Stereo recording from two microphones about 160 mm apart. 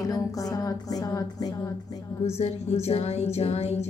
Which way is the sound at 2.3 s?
40° left (ahead or behind).